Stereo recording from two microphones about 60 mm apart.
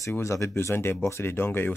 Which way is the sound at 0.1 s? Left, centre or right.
Left.